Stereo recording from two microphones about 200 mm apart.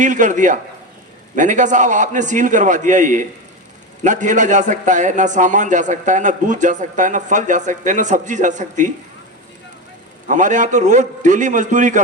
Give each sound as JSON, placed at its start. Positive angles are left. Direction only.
{"t": 0.0, "sound": "a man's voice", "side_deg": -40}
{"t": 10.2, "sound": "a man's voice", "side_deg": -40}